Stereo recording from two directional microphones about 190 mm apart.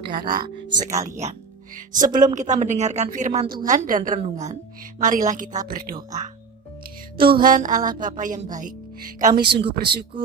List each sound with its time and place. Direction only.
0.0 s speech: 25° right (ahead or behind)
1.0 s a woman's voice: 40° right (ahead or behind)
5.7 s music: 45° right (ahead or behind)
7.2 s music: 50° right (ahead or behind)
9.2 s music: 50° right (ahead or behind)